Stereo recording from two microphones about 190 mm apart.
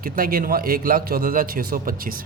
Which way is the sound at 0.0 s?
50° right (ahead or behind).